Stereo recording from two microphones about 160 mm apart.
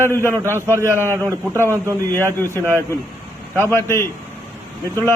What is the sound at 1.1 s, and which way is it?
Speech, 20° right (ahead or behind).